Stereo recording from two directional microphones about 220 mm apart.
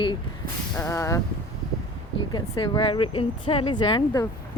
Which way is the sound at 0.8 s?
15° left (ahead or behind).